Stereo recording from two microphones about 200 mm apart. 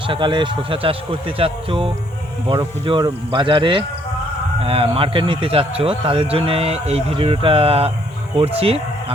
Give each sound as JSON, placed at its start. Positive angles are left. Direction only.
{"t": 0.1, "sound": "speech", "side_deg": -25}